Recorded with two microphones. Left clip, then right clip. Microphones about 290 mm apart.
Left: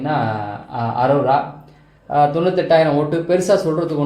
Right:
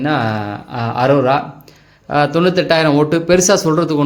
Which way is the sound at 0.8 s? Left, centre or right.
Right.